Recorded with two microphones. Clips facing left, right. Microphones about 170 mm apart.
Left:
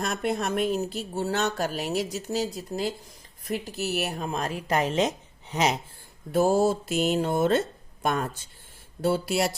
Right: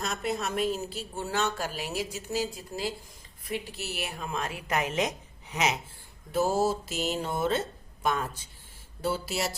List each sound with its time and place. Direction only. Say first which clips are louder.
0.0 s a woman's voice: left 4 dB; 55° left (ahead or behind)
1.4 s a woman's voice: left 3 dB; 40° left (ahead or behind)
6.3 s music: left 4 dB; 50° left (ahead or behind)
9.0 s a woman's voice: left 6 dB; 55° left (ahead or behind)